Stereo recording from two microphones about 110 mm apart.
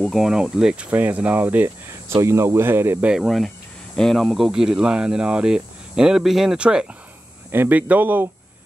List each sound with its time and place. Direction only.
0.1 s speech: 5° right (ahead or behind); by 3.1 s 20° right (ahead or behind)
3.1 s speech: centre (ahead or behind)